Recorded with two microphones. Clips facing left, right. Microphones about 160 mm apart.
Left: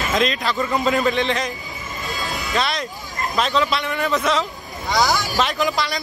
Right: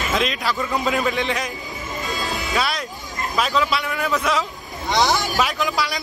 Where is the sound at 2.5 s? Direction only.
5° right (ahead or behind).